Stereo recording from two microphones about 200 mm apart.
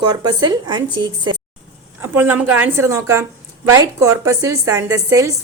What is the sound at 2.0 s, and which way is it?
A woman's voice, 10° right (ahead or behind).